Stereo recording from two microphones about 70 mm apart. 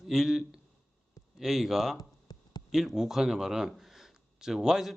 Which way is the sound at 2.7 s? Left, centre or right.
Centre.